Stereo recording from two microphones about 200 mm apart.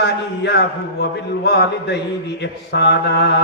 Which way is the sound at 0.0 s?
55° left (ahead or behind).